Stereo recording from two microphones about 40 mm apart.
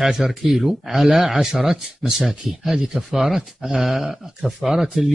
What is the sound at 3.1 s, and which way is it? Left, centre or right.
Speech, centre.